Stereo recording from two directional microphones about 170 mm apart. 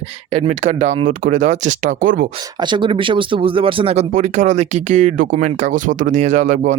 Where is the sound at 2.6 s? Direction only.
30° right (ahead or behind).